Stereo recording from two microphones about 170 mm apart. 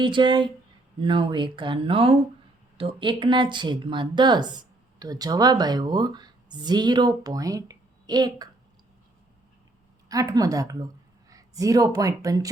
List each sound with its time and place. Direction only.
0.0 s speech: 30° right (ahead or behind)
10.1 s a woman's voice: 20° right (ahead or behind)